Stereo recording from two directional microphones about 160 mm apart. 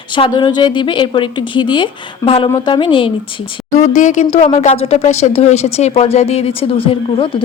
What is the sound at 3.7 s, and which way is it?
Speech, 50° left (ahead or behind).